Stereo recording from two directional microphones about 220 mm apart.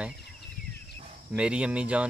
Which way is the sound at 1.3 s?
5° right (ahead or behind).